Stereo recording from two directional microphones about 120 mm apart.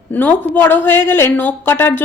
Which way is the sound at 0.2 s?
15° left (ahead or behind).